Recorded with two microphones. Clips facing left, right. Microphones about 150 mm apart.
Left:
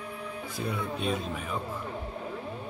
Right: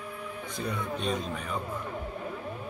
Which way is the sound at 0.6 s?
5° left (ahead or behind).